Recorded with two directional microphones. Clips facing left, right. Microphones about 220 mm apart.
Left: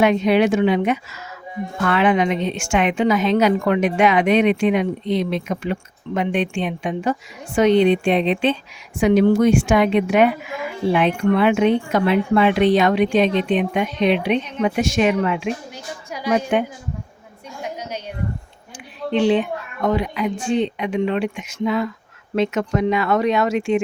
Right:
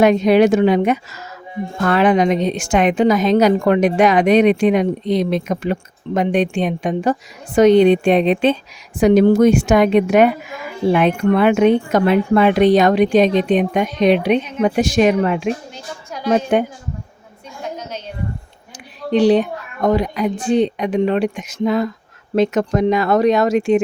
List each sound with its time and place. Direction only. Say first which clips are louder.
0.0 s a woman's voice: right 4 dB; 40° right (ahead or behind)
17.6 s a sound: right 1 dB; 10° left (ahead or behind)
19.1 s a woman's voice: right 4 dB; 35° right (ahead or behind)